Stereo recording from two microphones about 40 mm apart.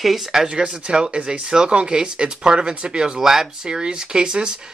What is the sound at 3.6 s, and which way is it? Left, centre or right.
Speech, right.